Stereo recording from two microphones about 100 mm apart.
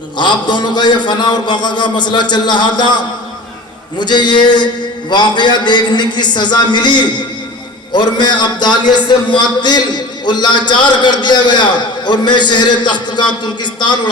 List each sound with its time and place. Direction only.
0.2 s a man's voice: 50° left (ahead or behind)